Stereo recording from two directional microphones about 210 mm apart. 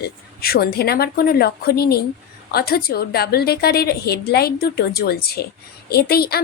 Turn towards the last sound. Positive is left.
turn(degrees=50)  # may be behind; listen again after turning